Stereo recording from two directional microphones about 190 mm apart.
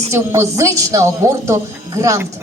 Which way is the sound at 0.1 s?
15° right (ahead or behind).